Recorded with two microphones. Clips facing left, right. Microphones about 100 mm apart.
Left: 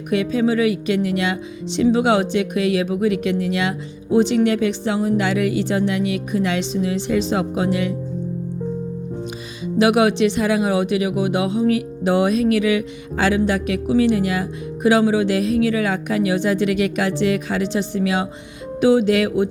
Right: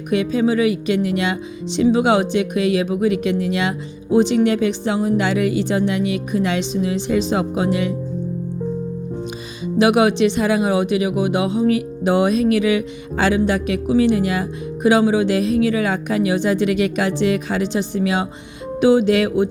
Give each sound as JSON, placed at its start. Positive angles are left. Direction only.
{"t": 0.1, "sound": "speech", "side_deg": -20}
{"t": 9.7, "sound": "speech", "side_deg": -20}